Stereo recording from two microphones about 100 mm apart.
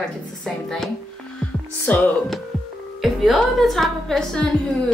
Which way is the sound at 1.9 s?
15° left (ahead or behind).